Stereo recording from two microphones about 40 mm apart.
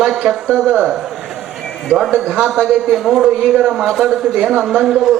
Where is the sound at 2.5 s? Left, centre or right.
Centre.